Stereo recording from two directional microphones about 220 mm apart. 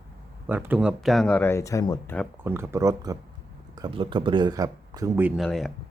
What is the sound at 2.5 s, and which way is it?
Speech, 10° right (ahead or behind).